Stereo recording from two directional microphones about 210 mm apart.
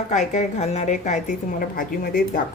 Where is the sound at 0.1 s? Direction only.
35° left (ahead or behind).